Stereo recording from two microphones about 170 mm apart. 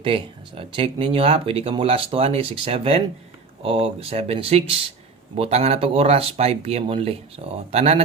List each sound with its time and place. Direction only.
0.0 s speech: 30° right (ahead or behind)